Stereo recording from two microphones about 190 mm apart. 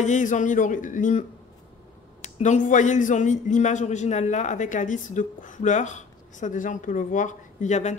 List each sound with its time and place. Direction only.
0.0 s a man's voice: 40° left (ahead or behind)
2.2 s a man's voice: 40° left (ahead or behind)